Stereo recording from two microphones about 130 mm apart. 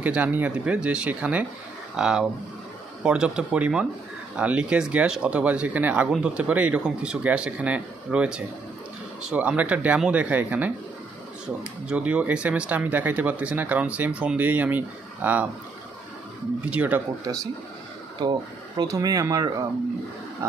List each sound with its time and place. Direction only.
0.0 s speech: 10° right (ahead or behind)
16.7 s speech: 10° right (ahead or behind)
18.8 s speech: 25° right (ahead or behind)